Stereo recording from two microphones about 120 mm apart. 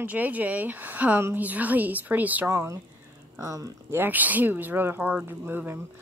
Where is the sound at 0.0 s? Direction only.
15° right (ahead or behind).